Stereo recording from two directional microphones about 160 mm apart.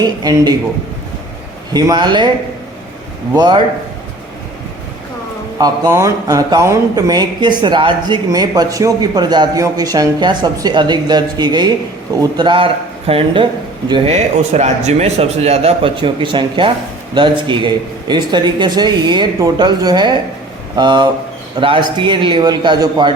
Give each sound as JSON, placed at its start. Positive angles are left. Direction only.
{"t": 0.0, "sound": "speech", "side_deg": -25}
{"t": 1.7, "sound": "speech", "side_deg": -25}
{"t": 3.3, "sound": "speech", "side_deg": -25}
{"t": 5.5, "sound": "a man's voice", "side_deg": -25}
{"t": 14.1, "sound": "a man's voice", "side_deg": -45}